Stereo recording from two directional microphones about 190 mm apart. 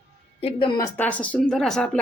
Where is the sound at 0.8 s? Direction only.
10° left (ahead or behind).